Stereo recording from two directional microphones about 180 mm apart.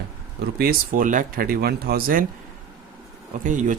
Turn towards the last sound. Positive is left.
turn(degrees=-45)  # may be behind; listen again after turning